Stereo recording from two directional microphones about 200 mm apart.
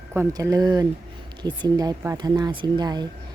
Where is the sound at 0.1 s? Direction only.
15° right (ahead or behind).